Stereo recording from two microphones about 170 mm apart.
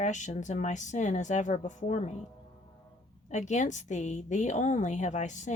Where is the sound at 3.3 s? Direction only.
45° left (ahead or behind).